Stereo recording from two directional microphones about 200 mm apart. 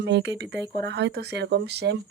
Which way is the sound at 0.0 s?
60° right (ahead or behind).